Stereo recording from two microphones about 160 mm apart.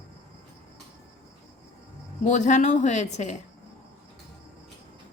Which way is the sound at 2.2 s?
50° left (ahead or behind).